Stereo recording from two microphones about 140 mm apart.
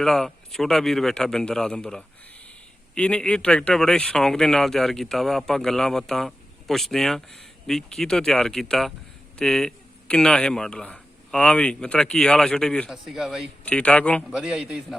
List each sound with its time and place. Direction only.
0.0 s speech: centre (ahead or behind)
13.7 s speech: 10° left (ahead or behind)
14.3 s speech: 5° right (ahead or behind)